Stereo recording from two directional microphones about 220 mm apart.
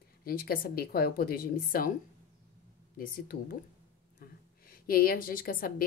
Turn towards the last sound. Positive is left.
turn(degrees=40)  # may be behind; listen again after turning